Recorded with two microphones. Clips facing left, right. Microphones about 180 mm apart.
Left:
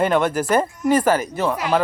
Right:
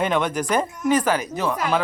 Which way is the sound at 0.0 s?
5° left (ahead or behind).